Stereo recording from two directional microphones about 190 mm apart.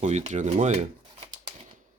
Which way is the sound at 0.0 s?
35° right (ahead or behind).